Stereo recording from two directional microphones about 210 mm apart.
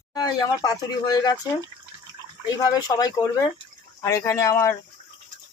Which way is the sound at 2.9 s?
15° left (ahead or behind).